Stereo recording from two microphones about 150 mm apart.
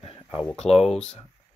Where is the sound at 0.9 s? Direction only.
5° left (ahead or behind).